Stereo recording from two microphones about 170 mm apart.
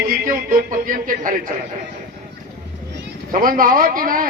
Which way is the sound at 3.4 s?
55° right (ahead or behind).